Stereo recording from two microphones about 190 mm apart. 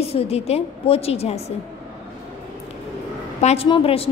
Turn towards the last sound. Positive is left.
turn(degrees=30)  # may be behind; listen again after turning